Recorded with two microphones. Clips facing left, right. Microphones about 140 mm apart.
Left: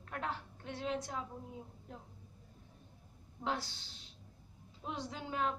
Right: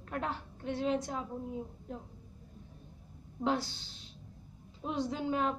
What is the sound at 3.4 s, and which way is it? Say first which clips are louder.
Speech: right 6 dB; 20° right (ahead or behind).